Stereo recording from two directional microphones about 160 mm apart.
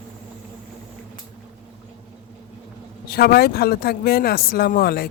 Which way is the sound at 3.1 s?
70° left (ahead or behind).